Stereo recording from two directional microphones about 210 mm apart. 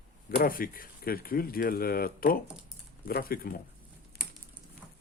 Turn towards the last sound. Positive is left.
turn(degrees=45)  # may be behind; listen again after turning